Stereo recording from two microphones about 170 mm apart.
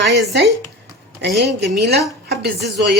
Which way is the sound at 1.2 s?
75° right (ahead or behind).